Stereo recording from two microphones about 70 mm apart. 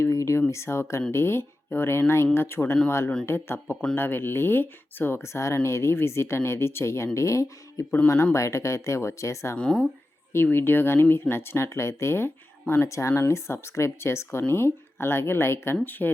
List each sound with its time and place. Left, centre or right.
0.0 s a sound: left
0.5 s speech: left
9.6 s speech: centre
10.3 s speech: left
12.9 s speech: left